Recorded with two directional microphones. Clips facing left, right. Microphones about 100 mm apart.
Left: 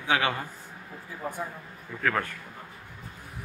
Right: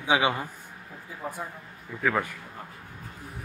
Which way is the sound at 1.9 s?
10° right (ahead or behind).